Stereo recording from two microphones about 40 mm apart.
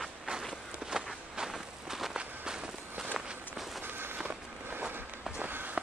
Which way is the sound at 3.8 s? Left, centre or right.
Right.